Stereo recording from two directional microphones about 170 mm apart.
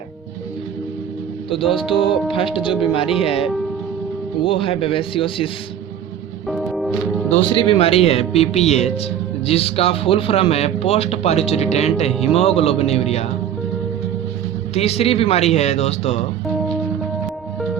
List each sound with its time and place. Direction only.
1.5 s speech: 30° left (ahead or behind)
6.5 s music: centre (ahead or behind)
7.3 s speech: 30° left (ahead or behind)
14.8 s speech: 35° left (ahead or behind)